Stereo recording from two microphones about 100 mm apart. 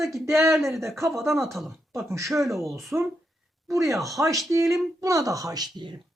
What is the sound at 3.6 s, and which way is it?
A woman's voice, 30° right (ahead or behind).